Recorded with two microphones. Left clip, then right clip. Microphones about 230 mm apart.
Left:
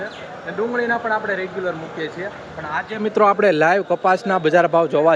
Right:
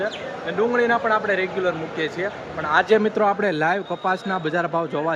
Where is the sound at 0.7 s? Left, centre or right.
Centre.